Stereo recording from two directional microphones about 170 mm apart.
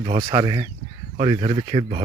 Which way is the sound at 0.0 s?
25° right (ahead or behind).